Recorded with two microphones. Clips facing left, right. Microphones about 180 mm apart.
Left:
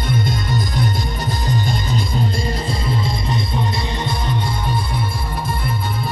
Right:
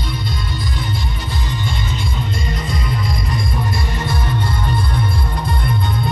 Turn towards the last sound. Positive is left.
turn(degrees=15)  # may be behind; listen again after turning